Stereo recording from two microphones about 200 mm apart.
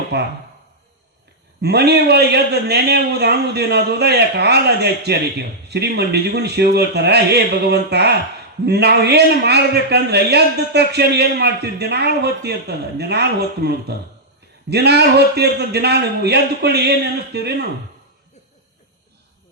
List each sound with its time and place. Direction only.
0.1 s a man's voice: 55° right (ahead or behind)
1.6 s a man's voice: 55° right (ahead or behind)